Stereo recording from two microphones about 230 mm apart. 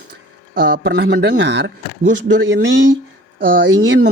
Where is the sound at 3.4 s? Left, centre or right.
Right.